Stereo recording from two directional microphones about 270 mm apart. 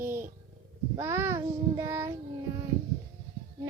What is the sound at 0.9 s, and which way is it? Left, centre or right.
Child singing, centre.